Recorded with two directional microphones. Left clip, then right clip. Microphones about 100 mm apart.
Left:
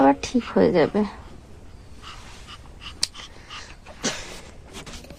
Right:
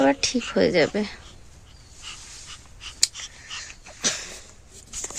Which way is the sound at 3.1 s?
30° right (ahead or behind).